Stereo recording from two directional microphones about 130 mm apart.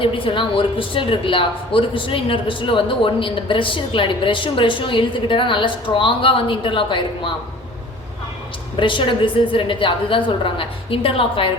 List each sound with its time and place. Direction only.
0.0 s speech: 40° left (ahead or behind)
8.7 s speech: 40° left (ahead or behind)